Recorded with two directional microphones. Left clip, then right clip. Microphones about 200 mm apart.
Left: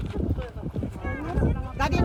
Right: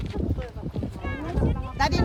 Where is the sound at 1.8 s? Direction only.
55° right (ahead or behind).